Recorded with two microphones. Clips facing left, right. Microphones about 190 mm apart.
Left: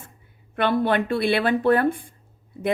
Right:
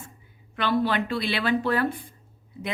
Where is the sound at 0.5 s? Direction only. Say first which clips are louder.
Left 3 dB; 55° left (ahead or behind).